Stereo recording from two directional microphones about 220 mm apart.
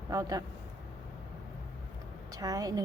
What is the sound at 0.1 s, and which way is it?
Speech, 15° right (ahead or behind).